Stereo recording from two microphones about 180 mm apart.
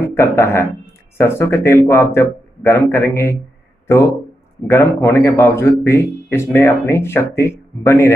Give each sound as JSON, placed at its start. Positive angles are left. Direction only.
{"t": 0.0, "sound": "speech", "side_deg": 15}